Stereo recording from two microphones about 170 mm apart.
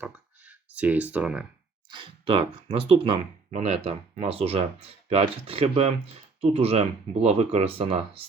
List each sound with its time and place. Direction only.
0.0 s clicking: 10° right (ahead or behind)
1.9 s speech: 30° right (ahead or behind)